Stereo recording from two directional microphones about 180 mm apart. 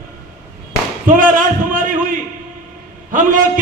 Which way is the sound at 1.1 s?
45° right (ahead or behind).